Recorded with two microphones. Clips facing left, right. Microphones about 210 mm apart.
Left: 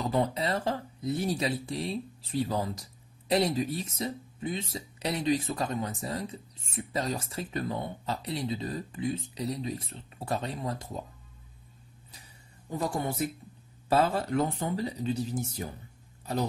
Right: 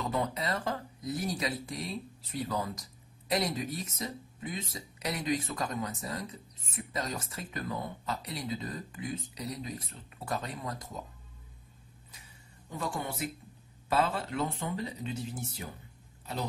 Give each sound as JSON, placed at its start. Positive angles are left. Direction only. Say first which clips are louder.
{"t": 0.0, "sound": "speech", "louder": "left 4 dB", "side_deg": 30}
{"t": 12.1, "sound": "a sound", "louder": "left 2 dB", "side_deg": 35}
{"t": 13.8, "sound": "speech", "louder": "left 4 dB", "side_deg": 40}